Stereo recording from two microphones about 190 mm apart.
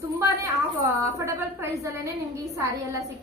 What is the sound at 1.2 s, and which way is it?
A woman's voice, 15° right (ahead or behind).